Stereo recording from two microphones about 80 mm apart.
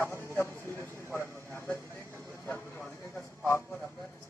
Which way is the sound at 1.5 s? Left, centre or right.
Left.